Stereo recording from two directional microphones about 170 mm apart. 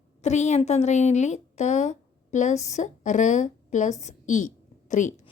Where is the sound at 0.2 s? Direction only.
45° left (ahead or behind).